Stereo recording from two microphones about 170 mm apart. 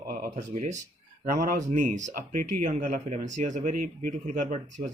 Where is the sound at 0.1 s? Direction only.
50° right (ahead or behind).